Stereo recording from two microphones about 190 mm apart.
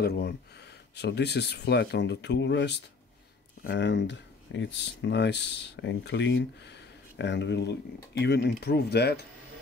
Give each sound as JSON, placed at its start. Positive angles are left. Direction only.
{"t": 0.0, "sound": "speech", "side_deg": 60}